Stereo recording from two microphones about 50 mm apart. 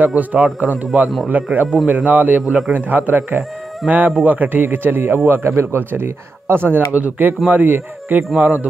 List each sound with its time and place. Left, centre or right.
0.0 s a man's voice: right
3.8 s speech: centre
4.2 s a man's voice: right
7.0 s a man's voice: right
8.4 s speech: right